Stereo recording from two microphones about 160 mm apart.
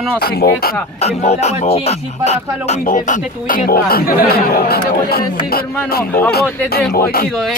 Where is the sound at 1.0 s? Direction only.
45° left (ahead or behind); by 6.0 s 70° left (ahead or behind).